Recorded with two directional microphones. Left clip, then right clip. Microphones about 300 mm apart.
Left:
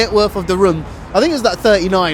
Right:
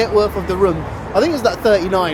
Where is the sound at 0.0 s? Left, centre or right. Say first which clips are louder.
Left 1 dB; left.